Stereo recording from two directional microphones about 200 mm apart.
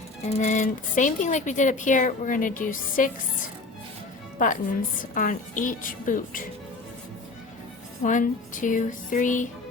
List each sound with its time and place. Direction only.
0.3 s speech: 35° left (ahead or behind)
4.4 s speech: 40° left (ahead or behind)
8.0 s speech: 40° left (ahead or behind)